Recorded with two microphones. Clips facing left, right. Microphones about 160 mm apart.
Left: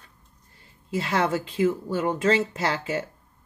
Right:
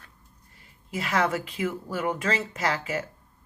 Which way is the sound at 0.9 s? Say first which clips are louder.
Left 2 dB; 30° left (ahead or behind).